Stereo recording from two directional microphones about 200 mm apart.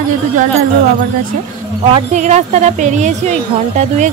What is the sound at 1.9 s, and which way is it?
Speech, 35° right (ahead or behind).